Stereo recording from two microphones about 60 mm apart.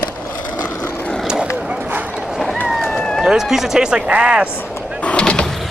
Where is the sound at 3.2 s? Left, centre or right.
Centre.